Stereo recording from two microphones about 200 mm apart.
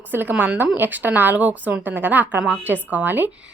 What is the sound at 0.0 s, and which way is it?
A woman's voice, 10° right (ahead or behind).